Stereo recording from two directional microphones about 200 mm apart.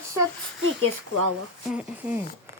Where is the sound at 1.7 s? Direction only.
5° right (ahead or behind).